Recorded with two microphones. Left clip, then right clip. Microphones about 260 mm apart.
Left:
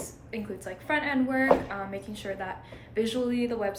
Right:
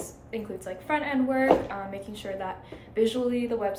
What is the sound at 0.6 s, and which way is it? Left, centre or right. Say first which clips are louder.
A woman's voice: even; centre.